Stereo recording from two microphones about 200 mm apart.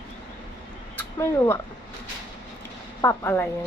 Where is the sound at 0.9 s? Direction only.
15° left (ahead or behind).